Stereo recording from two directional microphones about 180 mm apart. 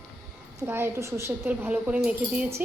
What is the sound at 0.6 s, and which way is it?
Speech, 15° right (ahead or behind).